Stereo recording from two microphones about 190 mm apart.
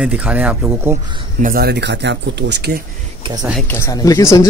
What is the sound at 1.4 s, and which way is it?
Speech, 50° right (ahead or behind).